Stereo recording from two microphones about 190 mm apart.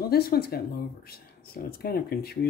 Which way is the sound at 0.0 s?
55° left (ahead or behind).